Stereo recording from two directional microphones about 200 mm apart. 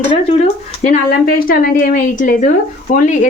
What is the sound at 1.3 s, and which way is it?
A woman's voice, 45° left (ahead or behind).